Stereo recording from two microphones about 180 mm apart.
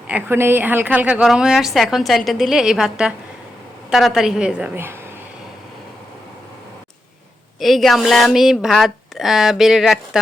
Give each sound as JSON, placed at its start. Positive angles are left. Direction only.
{"t": 0.1, "sound": "a woman's voice", "side_deg": -15}
{"t": 7.6, "sound": "a woman's voice", "side_deg": 0}